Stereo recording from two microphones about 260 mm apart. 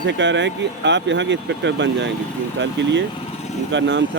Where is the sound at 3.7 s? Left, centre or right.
Right.